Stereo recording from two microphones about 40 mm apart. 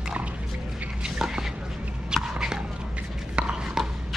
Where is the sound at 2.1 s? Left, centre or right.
Centre.